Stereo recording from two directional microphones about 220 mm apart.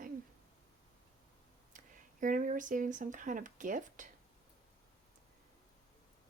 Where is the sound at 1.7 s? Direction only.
35° right (ahead or behind).